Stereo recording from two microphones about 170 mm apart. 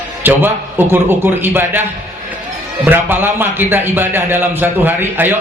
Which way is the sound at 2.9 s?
10° right (ahead or behind).